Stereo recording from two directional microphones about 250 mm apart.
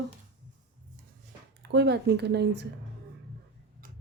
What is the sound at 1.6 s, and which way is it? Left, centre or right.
Speech, right.